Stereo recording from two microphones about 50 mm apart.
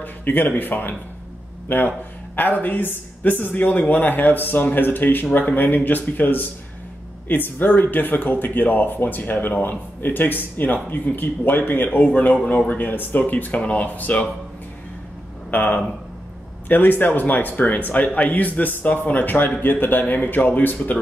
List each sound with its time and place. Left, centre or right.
0.0 s a sound: left
0.6 s speech: left
12.1 s speech: left
15.5 s speech: left